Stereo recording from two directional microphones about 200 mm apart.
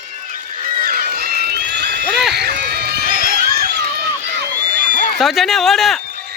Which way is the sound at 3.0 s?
45° right (ahead or behind).